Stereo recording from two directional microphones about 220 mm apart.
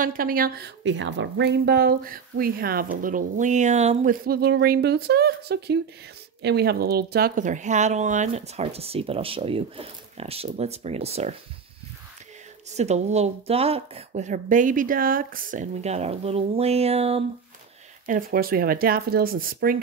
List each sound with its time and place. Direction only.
0.0 s a woman's voice: 40° right (ahead or behind)
12.7 s speech: 30° right (ahead or behind)
18.0 s speech: 40° right (ahead or behind)